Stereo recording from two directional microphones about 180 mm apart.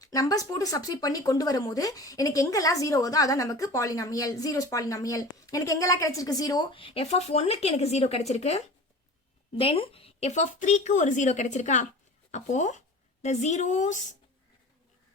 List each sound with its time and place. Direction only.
0.0 s speech: 20° left (ahead or behind); by 14.0 s 40° left (ahead or behind)